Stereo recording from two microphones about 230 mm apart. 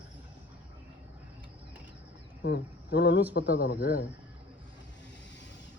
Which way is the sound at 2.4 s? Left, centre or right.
Left.